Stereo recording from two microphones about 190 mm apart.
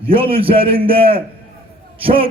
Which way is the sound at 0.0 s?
30° right (ahead or behind).